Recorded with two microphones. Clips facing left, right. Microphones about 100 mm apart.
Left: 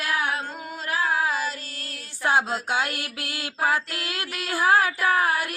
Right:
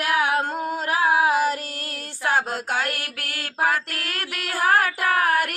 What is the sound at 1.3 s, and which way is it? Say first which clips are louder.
Child singing: right 7 dB; 60° right (ahead or behind).